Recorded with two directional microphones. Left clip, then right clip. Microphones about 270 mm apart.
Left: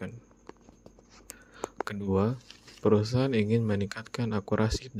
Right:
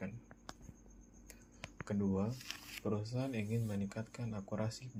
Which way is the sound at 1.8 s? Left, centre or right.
Left.